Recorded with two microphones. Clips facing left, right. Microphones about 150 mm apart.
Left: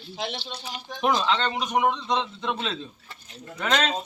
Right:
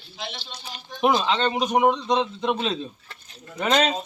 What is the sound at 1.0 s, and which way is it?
A man's voice, 10° right (ahead or behind).